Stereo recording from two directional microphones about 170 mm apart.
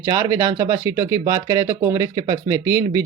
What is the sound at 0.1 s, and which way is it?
Speech, 15° right (ahead or behind).